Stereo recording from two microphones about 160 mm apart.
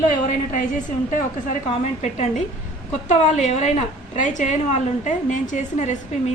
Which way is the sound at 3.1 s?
45° left (ahead or behind).